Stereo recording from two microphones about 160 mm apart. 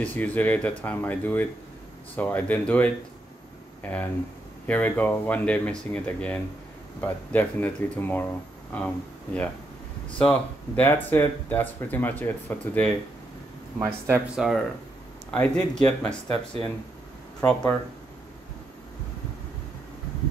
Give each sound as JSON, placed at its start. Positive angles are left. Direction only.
{"t": 0.0, "sound": "speech", "side_deg": 10}
{"t": 13.7, "sound": "speech", "side_deg": -15}
{"t": 14.3, "sound": "speech", "side_deg": 0}
{"t": 15.3, "sound": "speech", "side_deg": 10}
{"t": 17.4, "sound": "speech", "side_deg": 10}